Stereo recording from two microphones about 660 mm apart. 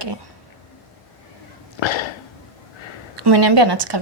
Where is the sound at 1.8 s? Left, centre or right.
Left.